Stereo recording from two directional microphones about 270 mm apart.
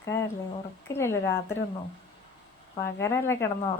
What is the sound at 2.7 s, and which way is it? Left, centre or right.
Speech, centre.